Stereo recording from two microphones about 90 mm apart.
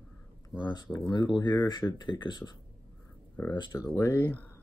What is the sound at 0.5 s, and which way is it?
Speech, 50° left (ahead or behind).